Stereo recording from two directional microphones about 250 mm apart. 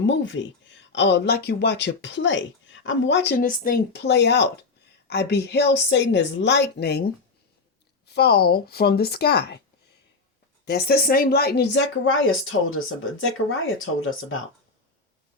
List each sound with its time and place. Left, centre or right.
0.0 s a woman's voice: left
10.7 s a woman's voice: left